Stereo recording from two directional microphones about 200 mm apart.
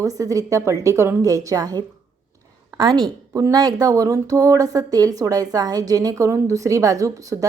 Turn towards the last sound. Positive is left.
turn(degrees=-15)  # may be behind; listen again after turning